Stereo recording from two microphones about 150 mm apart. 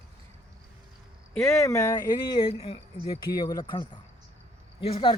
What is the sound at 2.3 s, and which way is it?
Speech, 35° left (ahead or behind).